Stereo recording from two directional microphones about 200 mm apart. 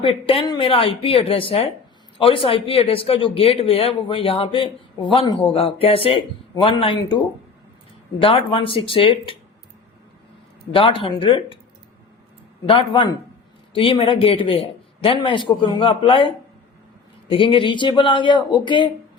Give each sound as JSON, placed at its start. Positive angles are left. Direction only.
{"t": 0.0, "sound": "speech", "side_deg": 25}
{"t": 10.7, "sound": "speech", "side_deg": 25}
{"t": 12.6, "sound": "speech", "side_deg": 25}